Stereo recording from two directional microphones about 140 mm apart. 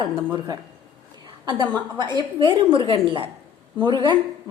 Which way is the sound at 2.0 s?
30° right (ahead or behind).